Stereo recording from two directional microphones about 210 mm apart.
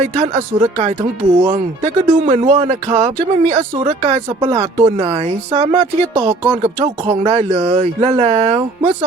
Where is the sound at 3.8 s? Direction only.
30° right (ahead or behind).